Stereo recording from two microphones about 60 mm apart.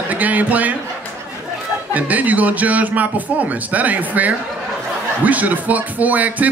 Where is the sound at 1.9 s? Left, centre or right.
Right.